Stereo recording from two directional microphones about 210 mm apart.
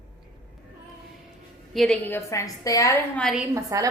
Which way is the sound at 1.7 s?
Centre (ahead or behind).